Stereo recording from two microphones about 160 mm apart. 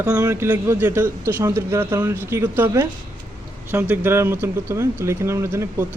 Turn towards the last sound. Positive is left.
turn(degrees=-15)  # may be behind; listen again after turning